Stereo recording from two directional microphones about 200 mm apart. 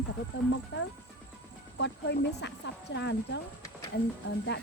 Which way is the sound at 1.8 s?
60° left (ahead or behind).